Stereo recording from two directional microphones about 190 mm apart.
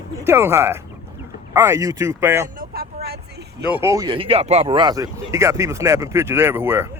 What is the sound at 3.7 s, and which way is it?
Speech, 15° right (ahead or behind).